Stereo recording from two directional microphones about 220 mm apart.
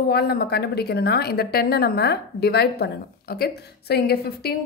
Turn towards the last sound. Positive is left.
turn(degrees=45)  # may be behind; listen again after turning